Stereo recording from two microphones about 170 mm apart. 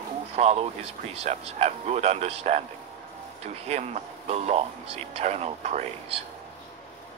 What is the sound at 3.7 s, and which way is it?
Speech, 40° right (ahead or behind).